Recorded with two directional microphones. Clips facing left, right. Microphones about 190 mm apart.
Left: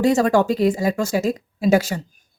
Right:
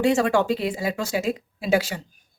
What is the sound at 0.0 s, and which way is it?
A woman's voice, 40° left (ahead or behind).